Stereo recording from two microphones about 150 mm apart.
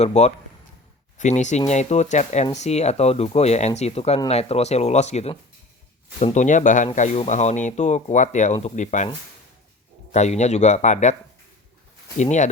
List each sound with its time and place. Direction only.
0.0 s speech: 45° left (ahead or behind)
10.1 s speech: 50° left (ahead or behind)
12.1 s speech: 50° left (ahead or behind)